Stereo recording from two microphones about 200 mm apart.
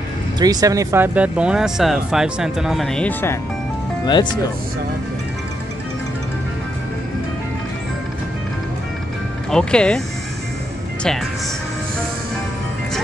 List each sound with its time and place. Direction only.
0.4 s speech: 20° right (ahead or behind); by 3.3 s 10° left (ahead or behind)
4.0 s speech: 20° left (ahead or behind)
9.5 s speech: 5° left (ahead or behind)